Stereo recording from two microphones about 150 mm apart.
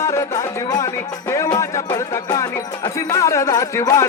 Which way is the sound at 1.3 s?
20° left (ahead or behind).